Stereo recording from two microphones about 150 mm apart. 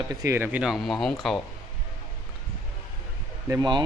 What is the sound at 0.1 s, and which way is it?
Speech, 20° right (ahead or behind).